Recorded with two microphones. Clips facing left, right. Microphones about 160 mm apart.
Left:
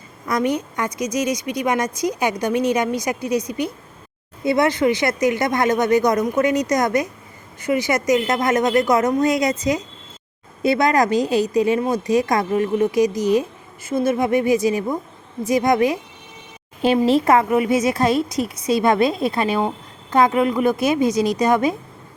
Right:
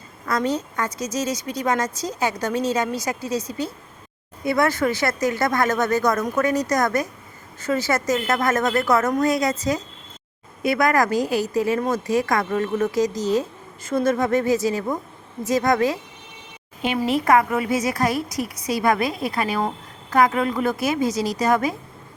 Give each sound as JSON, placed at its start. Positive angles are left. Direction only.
{"t": 0.3, "sound": "a woman's voice", "side_deg": 15}
{"t": 16.8, "sound": "a woman's voice", "side_deg": 30}